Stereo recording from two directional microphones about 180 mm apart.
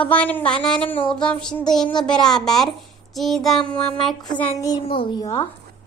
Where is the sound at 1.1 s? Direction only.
5° left (ahead or behind).